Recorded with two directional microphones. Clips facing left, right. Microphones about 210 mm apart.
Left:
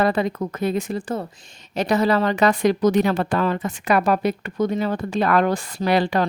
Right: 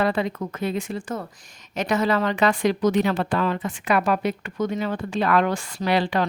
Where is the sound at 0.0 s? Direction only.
45° left (ahead or behind).